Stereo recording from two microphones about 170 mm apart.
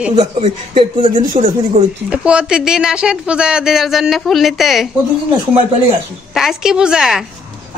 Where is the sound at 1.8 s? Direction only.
45° right (ahead or behind).